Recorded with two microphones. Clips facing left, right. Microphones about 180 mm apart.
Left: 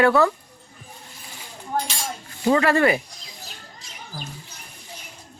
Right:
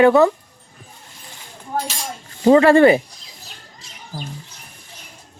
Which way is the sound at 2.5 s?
30° right (ahead or behind).